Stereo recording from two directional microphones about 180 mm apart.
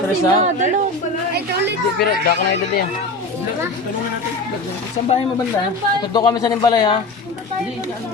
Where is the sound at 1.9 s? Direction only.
55° left (ahead or behind).